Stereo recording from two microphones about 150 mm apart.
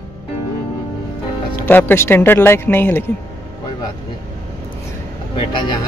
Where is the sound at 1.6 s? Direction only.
10° left (ahead or behind).